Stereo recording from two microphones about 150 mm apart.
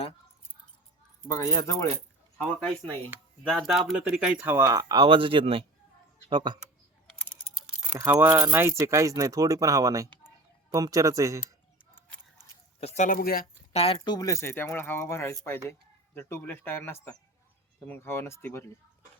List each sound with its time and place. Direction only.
1.3 s speech: 20° left (ahead or behind)
2.4 s speech: 5° left (ahead or behind); by 6.6 s 30° right (ahead or behind)
7.2 s typing: centre (ahead or behind)
7.9 s speech: 20° right (ahead or behind)
12.8 s speech: 50° left (ahead or behind)
13.1 s speech: 80° left
13.7 s speech: 40° left (ahead or behind)
14.0 s speech: 25° left (ahead or behind)